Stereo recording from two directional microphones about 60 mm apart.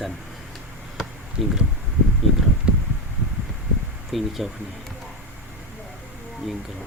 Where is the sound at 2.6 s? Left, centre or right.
Centre.